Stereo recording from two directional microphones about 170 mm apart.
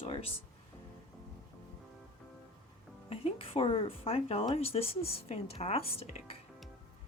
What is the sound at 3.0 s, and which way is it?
A woman's voice, 35° left (ahead or behind).